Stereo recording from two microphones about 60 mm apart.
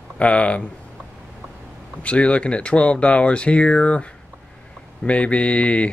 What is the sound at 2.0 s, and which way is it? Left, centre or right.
Speech, left.